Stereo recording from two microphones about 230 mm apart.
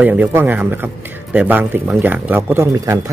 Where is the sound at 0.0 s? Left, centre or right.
Centre.